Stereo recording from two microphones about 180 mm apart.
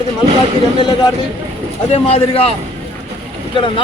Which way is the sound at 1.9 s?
35° left (ahead or behind).